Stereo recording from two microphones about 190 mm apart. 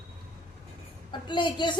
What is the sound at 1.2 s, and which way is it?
Speech, 25° left (ahead or behind).